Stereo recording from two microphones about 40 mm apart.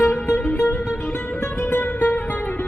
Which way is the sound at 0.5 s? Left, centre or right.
Left.